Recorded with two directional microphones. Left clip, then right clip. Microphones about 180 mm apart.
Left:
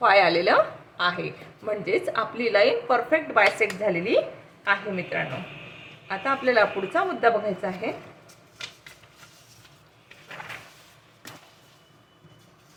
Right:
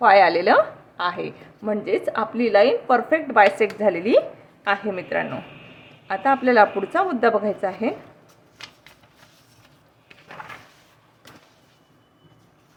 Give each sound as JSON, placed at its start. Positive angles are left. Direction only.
{"t": 0.0, "sound": "a woman's voice", "side_deg": -25}